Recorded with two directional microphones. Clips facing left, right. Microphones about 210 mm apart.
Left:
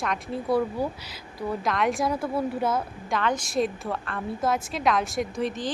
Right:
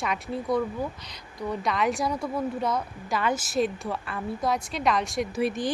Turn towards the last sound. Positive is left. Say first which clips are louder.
# right 2 dB
turn(degrees=-10)  # may be behind; listen again after turning